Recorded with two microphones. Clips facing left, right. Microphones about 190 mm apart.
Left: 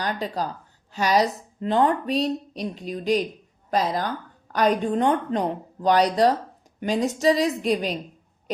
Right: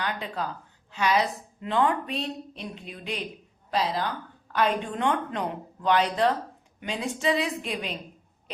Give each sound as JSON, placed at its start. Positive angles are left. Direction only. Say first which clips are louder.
{"t": 0.0, "sound": "a woman's voice", "louder": "left 4 dB", "side_deg": 40}